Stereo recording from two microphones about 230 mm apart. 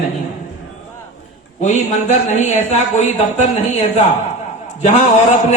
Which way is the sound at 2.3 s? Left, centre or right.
Left.